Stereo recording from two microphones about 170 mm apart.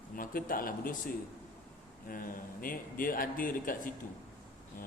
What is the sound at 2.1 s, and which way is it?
A man's voice, 55° left (ahead or behind).